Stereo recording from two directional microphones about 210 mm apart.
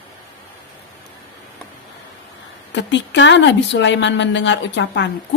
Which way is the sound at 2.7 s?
60° left (ahead or behind).